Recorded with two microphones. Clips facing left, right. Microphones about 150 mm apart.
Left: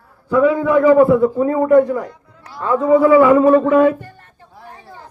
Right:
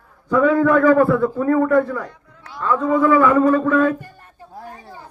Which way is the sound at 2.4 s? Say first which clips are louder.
Left 3 dB; 10° left (ahead or behind).